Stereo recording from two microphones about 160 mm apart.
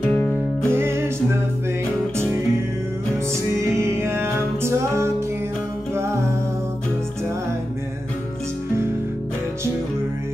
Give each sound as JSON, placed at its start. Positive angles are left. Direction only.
{"t": 0.0, "sound": "music", "side_deg": 10}
{"t": 0.7, "sound": "music", "side_deg": -15}
{"t": 3.7, "sound": "music", "side_deg": -15}